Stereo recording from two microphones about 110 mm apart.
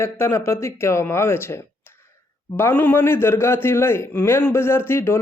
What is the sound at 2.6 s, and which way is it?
A man's voice, 20° left (ahead or behind).